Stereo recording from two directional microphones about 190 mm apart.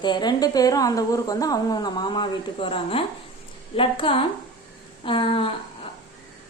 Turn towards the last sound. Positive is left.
turn(degrees=30)  # may be behind; listen again after turning